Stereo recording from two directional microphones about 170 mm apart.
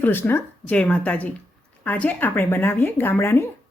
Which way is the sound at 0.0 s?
15° left (ahead or behind).